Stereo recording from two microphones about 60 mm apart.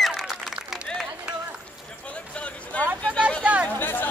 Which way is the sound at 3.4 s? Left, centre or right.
Right.